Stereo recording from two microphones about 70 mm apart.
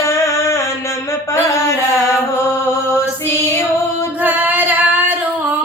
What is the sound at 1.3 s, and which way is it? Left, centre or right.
Mantra, left.